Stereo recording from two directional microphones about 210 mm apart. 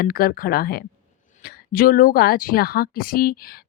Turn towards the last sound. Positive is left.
turn(degrees=45)  # may be behind; listen again after turning